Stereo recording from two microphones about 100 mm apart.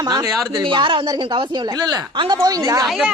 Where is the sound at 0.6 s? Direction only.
55° right (ahead or behind); by 2.8 s 35° right (ahead or behind).